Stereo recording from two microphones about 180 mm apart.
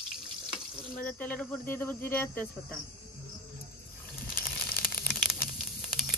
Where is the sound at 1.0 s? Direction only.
5° left (ahead or behind).